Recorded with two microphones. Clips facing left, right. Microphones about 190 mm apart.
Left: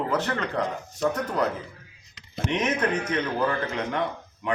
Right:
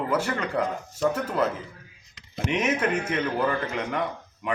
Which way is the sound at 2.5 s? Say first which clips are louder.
Even; 10° right (ahead or behind).